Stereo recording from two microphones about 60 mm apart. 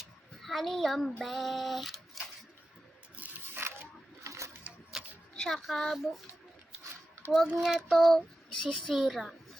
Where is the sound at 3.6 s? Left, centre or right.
Right.